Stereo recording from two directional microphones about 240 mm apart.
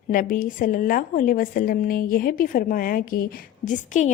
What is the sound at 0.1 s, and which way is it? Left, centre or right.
A woman's voice, left.